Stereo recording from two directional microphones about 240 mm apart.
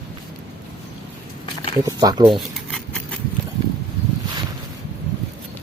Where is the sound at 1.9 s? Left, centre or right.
Centre.